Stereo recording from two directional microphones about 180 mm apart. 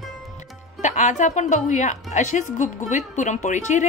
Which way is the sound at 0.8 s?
40° left (ahead or behind).